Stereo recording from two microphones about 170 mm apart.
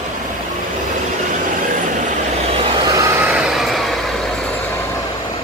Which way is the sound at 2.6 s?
20° right (ahead or behind).